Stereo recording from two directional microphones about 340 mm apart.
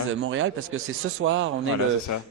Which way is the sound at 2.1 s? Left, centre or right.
Left.